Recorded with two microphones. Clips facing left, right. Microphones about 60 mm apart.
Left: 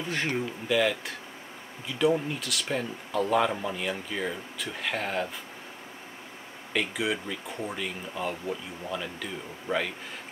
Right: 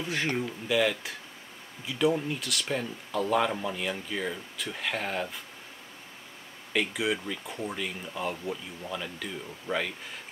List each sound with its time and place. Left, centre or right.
0.0 s speech: centre
6.7 s speech: centre